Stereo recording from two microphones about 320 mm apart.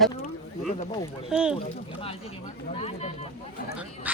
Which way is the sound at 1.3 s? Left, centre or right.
Centre.